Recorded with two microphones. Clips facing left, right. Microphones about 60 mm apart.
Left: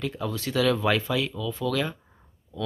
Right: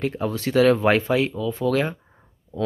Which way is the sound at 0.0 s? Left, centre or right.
Right.